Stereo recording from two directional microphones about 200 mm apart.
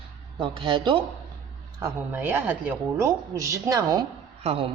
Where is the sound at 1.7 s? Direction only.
10° right (ahead or behind).